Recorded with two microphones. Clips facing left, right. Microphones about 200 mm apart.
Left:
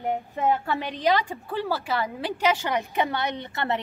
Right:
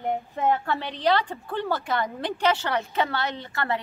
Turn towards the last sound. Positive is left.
turn(degrees=20)  # may be behind; listen again after turning